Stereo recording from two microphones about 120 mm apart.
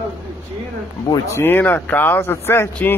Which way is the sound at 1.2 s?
20° left (ahead or behind).